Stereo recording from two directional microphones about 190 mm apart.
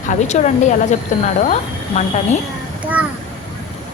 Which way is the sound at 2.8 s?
5° right (ahead or behind).